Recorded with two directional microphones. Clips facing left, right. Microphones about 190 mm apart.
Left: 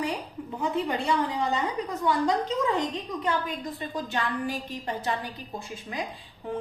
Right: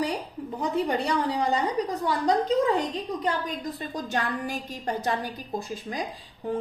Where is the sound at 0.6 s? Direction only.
40° right (ahead or behind).